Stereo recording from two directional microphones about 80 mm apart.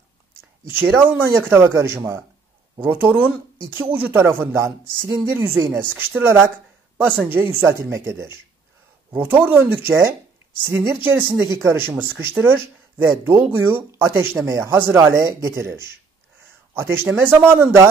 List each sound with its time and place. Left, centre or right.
0.7 s speech: right
9.1 s speech: right
11.4 s speech: right